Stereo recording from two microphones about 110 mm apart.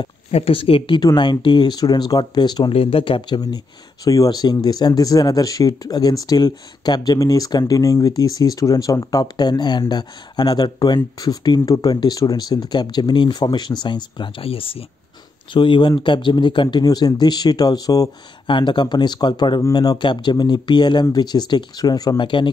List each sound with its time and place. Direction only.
0.3 s speech: 60° left (ahead or behind); by 2.7 s 40° left (ahead or behind)
2.7 s speech: 55° left (ahead or behind)
15.5 s speech: 45° left (ahead or behind)
18.5 s speech: 45° left (ahead or behind)